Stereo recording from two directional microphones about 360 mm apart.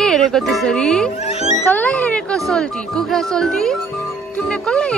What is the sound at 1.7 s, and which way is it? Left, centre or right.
Speech, centre.